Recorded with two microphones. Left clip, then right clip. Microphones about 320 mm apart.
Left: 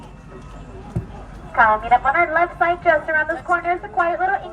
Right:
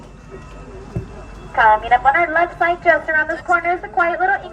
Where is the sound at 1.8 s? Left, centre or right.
Centre.